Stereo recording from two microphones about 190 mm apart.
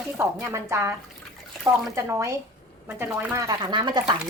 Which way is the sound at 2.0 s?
15° right (ahead or behind).